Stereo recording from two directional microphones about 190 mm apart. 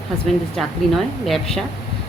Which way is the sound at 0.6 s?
Centre (ahead or behind).